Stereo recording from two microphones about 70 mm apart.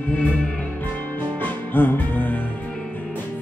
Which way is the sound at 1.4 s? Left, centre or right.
Left.